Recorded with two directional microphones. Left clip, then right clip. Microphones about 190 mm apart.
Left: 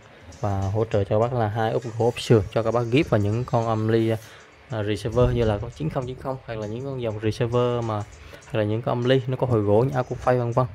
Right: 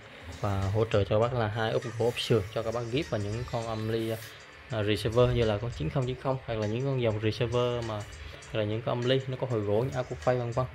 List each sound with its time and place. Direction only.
0.4 s speech: 15° left (ahead or behind); by 4.2 s 40° left (ahead or behind)
4.6 s speech: 15° left (ahead or behind)